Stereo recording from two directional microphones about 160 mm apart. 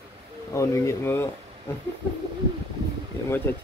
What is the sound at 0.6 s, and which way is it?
Speech, 20° left (ahead or behind).